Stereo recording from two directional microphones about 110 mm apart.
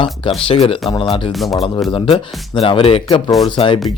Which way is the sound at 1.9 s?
50° left (ahead or behind).